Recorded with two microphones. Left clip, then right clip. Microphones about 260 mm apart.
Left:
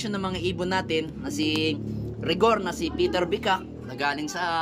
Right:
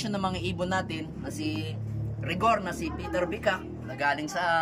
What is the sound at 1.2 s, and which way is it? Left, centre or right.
Speech, centre.